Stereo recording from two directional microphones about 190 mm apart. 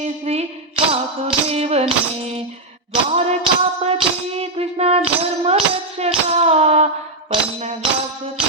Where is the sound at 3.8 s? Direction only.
35° right (ahead or behind).